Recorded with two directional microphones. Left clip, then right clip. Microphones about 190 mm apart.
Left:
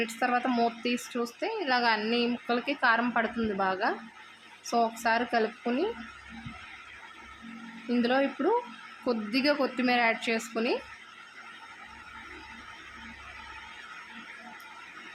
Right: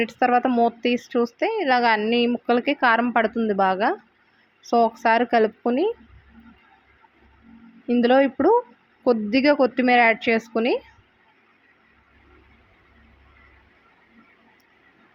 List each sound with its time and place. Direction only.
0.0 s speech: 30° right (ahead or behind)
8.0 s speech: 35° right (ahead or behind)